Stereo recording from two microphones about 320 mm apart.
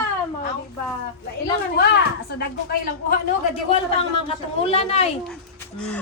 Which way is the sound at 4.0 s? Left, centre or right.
Centre.